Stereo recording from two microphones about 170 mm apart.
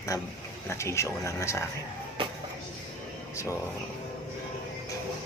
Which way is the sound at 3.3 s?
15° left (ahead or behind).